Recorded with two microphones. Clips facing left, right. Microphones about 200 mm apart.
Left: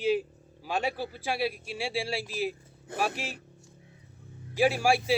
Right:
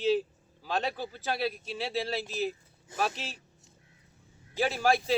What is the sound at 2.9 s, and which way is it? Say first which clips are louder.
Speech: left 1 dB; 60° left (ahead or behind).